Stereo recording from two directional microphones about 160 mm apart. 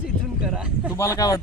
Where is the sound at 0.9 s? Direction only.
20° left (ahead or behind).